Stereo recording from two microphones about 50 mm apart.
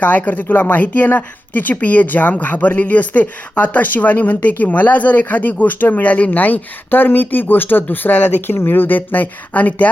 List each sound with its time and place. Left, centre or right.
0.0 s speech: left